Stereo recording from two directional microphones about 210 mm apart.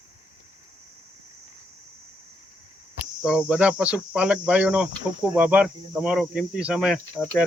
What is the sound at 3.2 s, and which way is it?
Speech, 5° right (ahead or behind).